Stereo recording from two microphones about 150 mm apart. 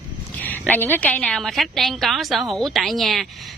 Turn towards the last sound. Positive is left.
turn(degrees=0)  # may be behind; listen again after turning